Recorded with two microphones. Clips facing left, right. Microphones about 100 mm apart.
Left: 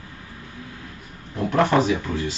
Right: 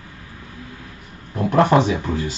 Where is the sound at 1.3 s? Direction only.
35° right (ahead or behind).